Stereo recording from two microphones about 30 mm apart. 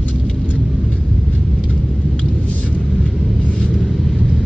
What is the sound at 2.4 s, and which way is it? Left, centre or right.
Vehicle, left.